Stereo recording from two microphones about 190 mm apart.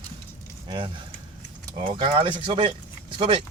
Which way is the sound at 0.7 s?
25° right (ahead or behind).